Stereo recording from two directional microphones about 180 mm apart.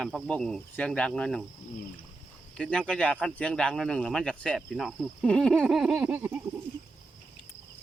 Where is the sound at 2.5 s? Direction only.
5° left (ahead or behind).